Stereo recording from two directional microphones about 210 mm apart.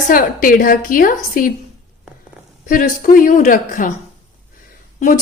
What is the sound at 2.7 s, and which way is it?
A woman's voice, 40° left (ahead or behind).